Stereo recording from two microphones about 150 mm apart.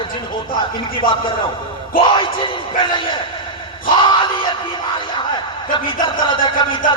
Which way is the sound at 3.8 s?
35° left (ahead or behind).